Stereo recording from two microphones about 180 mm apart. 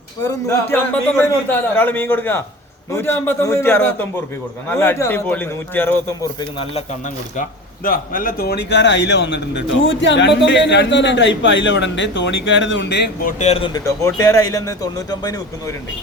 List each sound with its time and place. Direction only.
0.7 s a man's voice: 10° left (ahead or behind)
7.9 s speech: 50° left (ahead or behind); by 13.1 s 75° left (ahead or behind)
13.2 s speech: 35° left (ahead or behind)
13.7 s a man's voice: 20° left (ahead or behind)